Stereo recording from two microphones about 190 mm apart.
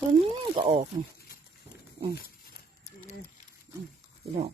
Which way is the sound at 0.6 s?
25° right (ahead or behind).